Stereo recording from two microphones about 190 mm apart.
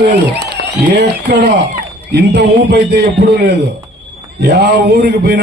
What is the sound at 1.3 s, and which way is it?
A man's voice, 60° right (ahead or behind).